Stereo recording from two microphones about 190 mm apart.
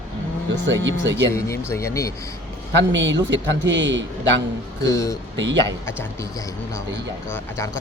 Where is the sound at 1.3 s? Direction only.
15° left (ahead or behind).